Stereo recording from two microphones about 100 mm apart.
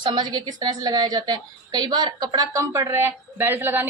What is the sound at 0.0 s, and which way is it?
A woman's voice, 50° right (ahead or behind).